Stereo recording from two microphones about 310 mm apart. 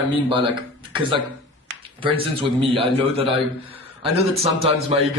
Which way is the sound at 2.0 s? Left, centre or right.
Centre.